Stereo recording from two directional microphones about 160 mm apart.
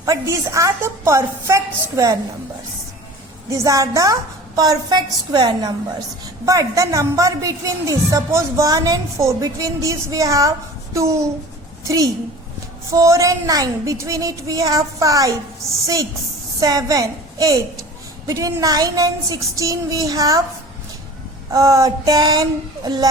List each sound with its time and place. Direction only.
0.0 s a woman's voice: 20° right (ahead or behind)
3.5 s a woman's voice: 20° right (ahead or behind)
12.9 s a woman's voice: 20° right (ahead or behind)
16.6 s a woman's voice: 20° right (ahead or behind)
21.5 s a woman's voice: 20° right (ahead or behind)